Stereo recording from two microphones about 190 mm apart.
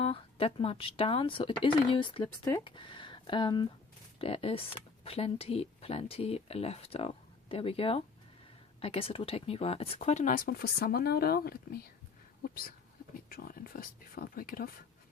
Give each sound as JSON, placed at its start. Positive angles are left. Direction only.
{"t": 0.0, "sound": "speech", "side_deg": 30}
{"t": 12.4, "sound": "a sound", "side_deg": 50}
{"t": 13.3, "sound": "speech", "side_deg": 50}